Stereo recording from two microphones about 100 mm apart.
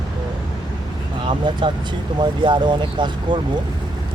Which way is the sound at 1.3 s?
55° right (ahead or behind).